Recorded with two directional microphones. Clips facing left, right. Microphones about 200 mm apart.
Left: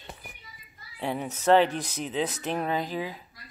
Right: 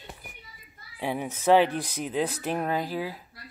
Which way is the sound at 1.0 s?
10° right (ahead or behind).